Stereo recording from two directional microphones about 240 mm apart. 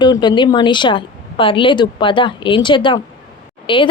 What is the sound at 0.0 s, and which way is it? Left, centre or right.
A woman's voice, centre.